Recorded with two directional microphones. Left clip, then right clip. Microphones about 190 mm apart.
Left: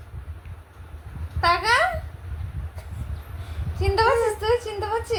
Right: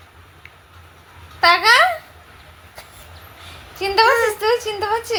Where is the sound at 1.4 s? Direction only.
35° right (ahead or behind).